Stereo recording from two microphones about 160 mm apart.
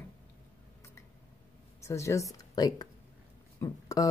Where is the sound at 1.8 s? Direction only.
20° left (ahead or behind).